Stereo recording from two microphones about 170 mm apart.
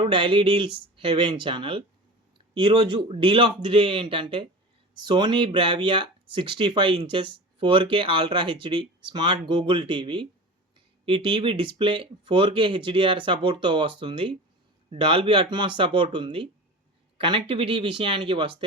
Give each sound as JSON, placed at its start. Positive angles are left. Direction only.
{"t": 0.1, "sound": "speech", "side_deg": -30}